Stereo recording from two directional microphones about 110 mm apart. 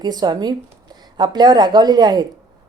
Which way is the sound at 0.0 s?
40° right (ahead or behind).